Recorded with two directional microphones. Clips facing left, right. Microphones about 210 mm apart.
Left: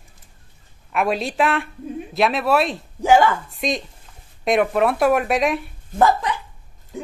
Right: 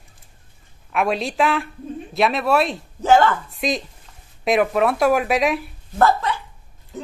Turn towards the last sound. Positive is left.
turn(degrees=15)  # may be behind; listen again after turning